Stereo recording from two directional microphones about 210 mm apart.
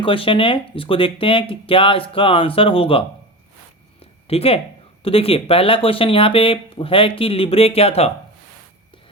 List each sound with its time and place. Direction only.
0.0 s speech: 25° left (ahead or behind)
4.0 s a sound: 30° left (ahead or behind)
5.0 s speech: 25° left (ahead or behind)